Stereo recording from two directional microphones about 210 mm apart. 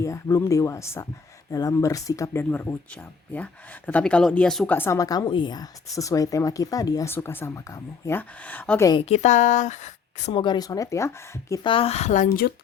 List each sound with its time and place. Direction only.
0.0 s speech: 15° left (ahead or behind)
8.9 s a woman's voice: 25° left (ahead or behind)